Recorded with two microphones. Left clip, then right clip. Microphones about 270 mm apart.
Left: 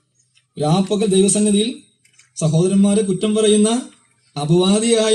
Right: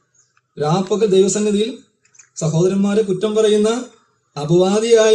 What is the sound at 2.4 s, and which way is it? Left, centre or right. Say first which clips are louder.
A man's voice: even; left.